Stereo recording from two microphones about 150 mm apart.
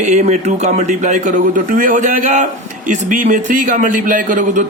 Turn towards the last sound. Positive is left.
turn(degrees=-65)  # may be behind; listen again after turning